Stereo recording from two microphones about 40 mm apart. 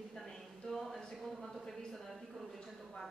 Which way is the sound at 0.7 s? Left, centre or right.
Centre.